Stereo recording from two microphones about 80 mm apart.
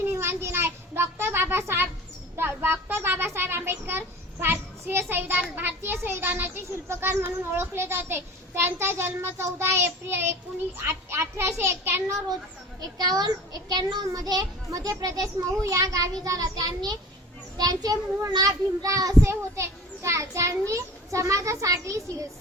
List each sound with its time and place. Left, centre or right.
0.0 s a sound: right
2.3 s a child's voice: right
12.8 s a child's voice: right
19.2 s a child's voice: right